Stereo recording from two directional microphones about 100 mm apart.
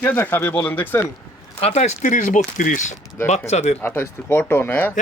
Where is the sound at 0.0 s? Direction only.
20° left (ahead or behind).